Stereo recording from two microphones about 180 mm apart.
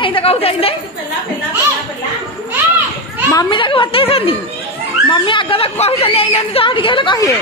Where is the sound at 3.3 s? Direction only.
25° left (ahead or behind).